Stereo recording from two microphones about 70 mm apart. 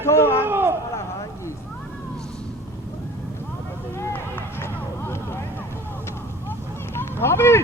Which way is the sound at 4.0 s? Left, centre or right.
Left.